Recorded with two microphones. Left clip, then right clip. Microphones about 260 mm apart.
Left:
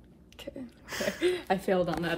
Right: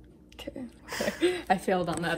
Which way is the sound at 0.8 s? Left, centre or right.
Centre.